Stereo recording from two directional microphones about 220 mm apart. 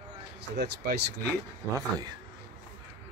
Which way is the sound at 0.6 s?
45° right (ahead or behind).